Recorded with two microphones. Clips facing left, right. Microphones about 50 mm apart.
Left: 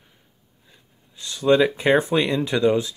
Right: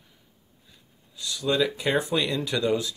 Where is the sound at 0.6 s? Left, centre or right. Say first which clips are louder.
Left 3 dB; left.